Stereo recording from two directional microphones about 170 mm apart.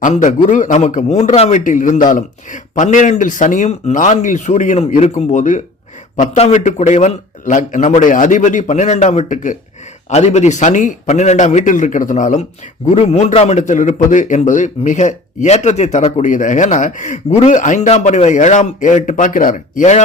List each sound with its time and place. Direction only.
0.0 s a man's voice: 45° left (ahead or behind)